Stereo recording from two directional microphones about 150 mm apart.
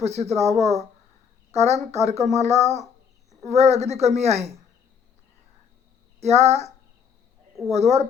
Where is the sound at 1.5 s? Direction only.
45° right (ahead or behind).